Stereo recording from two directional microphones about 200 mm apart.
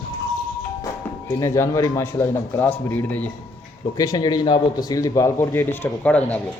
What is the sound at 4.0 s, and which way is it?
Speech, 20° left (ahead or behind).